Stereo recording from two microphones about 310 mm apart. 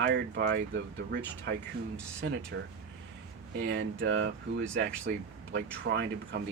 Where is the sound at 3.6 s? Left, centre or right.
Right.